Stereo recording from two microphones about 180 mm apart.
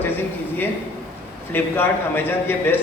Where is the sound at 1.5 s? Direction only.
10° left (ahead or behind).